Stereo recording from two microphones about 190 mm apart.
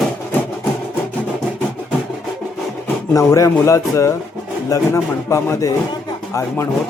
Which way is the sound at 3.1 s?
15° left (ahead or behind).